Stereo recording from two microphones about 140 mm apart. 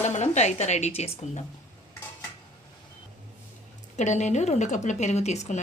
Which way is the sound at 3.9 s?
55° left (ahead or behind).